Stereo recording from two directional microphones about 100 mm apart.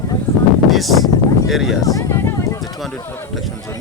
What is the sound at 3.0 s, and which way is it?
Speech, 20° left (ahead or behind).